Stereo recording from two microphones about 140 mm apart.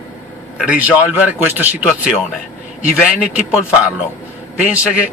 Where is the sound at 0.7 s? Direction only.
10° right (ahead or behind).